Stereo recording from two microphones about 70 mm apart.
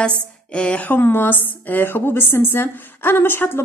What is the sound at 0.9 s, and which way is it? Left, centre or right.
A woman's voice, left.